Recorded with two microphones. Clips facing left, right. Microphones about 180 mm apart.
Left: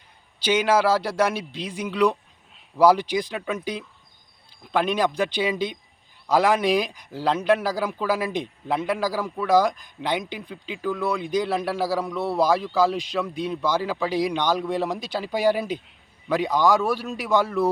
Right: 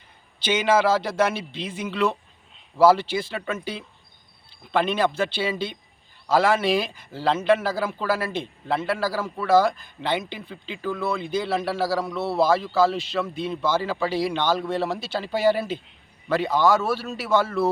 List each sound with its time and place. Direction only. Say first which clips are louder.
0.3 s speech: even; 10° left (ahead or behind)